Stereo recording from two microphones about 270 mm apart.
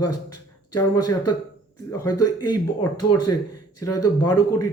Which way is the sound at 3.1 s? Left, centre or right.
Left.